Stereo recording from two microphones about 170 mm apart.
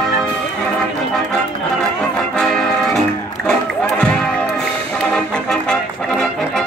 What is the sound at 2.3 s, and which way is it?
Music, 5° left (ahead or behind).